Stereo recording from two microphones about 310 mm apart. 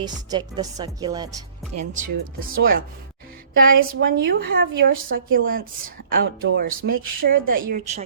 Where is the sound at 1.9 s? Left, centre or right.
Right.